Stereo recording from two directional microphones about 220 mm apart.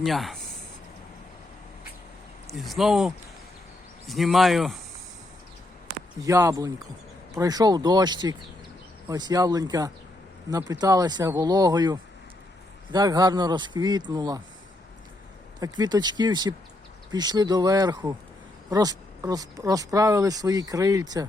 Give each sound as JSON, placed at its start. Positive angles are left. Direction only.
{"t": 0.0, "sound": "speech", "side_deg": 0}
{"t": 2.5, "sound": "speech", "side_deg": 0}
{"t": 6.2, "sound": "speech", "side_deg": -15}
{"t": 15.6, "sound": "speech", "side_deg": -20}